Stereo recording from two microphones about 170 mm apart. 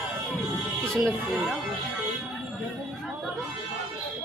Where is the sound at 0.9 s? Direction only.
5° right (ahead or behind).